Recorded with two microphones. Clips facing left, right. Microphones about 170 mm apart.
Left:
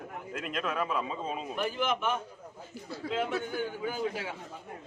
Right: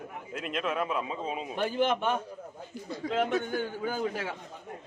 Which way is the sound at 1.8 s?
40° right (ahead or behind).